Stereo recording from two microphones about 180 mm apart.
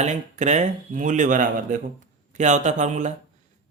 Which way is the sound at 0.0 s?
40° right (ahead or behind).